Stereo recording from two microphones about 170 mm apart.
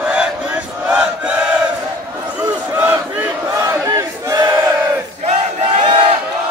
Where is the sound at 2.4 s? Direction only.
10° right (ahead or behind).